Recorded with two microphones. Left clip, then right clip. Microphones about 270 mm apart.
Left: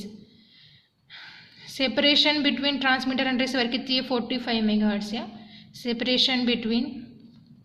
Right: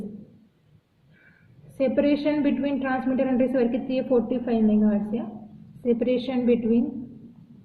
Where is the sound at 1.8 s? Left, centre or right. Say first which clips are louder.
Left 2 dB; left.